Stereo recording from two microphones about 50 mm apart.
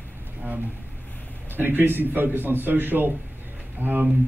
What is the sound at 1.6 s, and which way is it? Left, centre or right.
Speech, right.